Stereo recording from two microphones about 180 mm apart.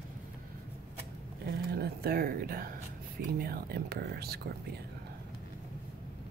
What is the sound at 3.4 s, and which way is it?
Speech, 60° right (ahead or behind).